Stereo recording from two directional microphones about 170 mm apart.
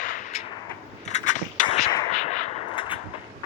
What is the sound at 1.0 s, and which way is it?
Skateboard, 45° left (ahead or behind).